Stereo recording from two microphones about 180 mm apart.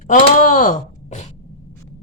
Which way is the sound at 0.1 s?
45° left (ahead or behind).